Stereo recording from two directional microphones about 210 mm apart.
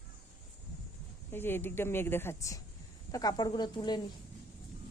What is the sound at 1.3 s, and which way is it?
Speech, 10° left (ahead or behind).